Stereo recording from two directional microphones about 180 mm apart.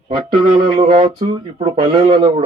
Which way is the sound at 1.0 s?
30° right (ahead or behind).